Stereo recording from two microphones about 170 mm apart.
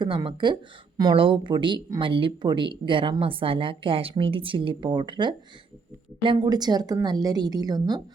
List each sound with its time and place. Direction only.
0.0 s speech: 30° right (ahead or behind)